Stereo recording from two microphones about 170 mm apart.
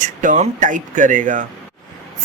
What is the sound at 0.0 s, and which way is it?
A woman's voice, 45° right (ahead or behind).